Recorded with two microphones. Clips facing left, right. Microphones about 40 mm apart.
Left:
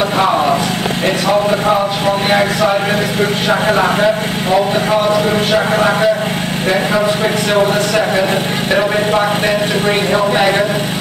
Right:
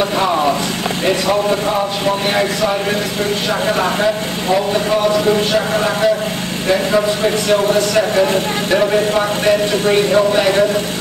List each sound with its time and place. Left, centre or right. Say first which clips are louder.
0.2 s vehicle: left 4 dB; centre
1.0 s speech: left 1 dB; centre